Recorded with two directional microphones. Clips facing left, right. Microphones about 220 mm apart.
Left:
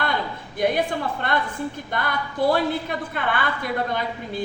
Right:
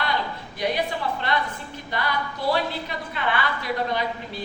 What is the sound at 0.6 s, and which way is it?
A woman's voice, 50° left (ahead or behind).